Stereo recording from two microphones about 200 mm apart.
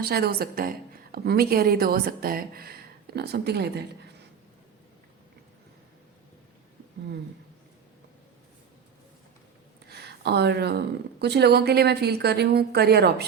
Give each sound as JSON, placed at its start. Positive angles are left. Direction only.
{"t": 0.0, "sound": "speech", "side_deg": -50}
{"t": 9.9, "sound": "a sound", "side_deg": -55}
{"t": 11.2, "sound": "speech", "side_deg": -55}